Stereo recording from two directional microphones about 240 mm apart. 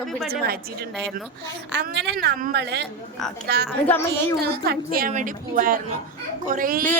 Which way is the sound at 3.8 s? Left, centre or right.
Centre.